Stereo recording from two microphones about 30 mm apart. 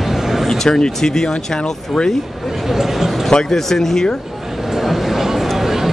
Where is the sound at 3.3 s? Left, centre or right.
Left.